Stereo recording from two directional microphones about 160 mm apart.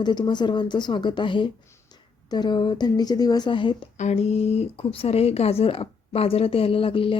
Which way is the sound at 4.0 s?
45° left (ahead or behind).